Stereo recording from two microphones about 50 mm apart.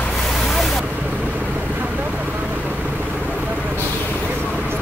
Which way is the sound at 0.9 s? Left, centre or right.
Right.